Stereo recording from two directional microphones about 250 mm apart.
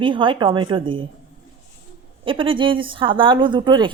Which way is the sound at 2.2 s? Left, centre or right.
Centre.